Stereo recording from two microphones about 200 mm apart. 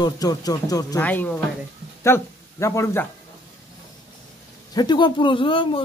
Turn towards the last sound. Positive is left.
turn(degrees=25)  # may be behind; listen again after turning